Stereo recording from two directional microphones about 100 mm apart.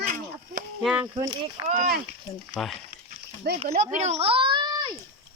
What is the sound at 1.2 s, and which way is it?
Speech, 45° right (ahead or behind).